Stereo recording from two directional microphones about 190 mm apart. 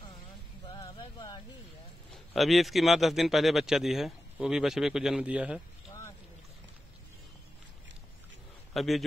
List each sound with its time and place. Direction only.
0.7 s a sound: 20° left (ahead or behind)
2.3 s speech: centre (ahead or behind)
8.7 s a man's voice: centre (ahead or behind)